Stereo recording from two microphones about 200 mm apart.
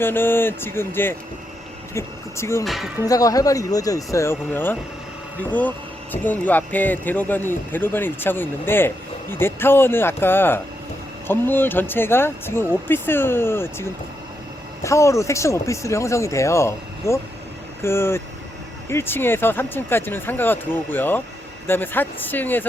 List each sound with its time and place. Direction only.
0.0 s speech: 10° left (ahead or behind)
2.6 s speech: centre (ahead or behind)
3.0 s speech: 15° left (ahead or behind)